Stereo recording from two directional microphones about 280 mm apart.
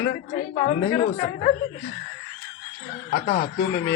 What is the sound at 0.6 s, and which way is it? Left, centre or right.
Speech, left.